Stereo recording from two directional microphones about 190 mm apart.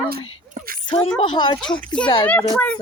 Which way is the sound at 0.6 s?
45° right (ahead or behind).